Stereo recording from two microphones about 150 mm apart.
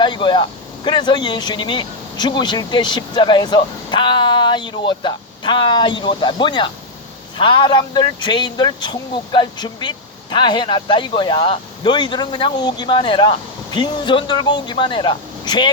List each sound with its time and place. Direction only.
0.0 s speech: 30° left (ahead or behind)